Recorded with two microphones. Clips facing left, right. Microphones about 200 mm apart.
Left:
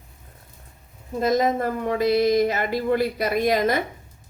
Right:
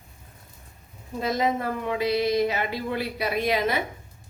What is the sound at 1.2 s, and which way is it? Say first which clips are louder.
Speech: left 4 dB; 45° left (ahead or behind).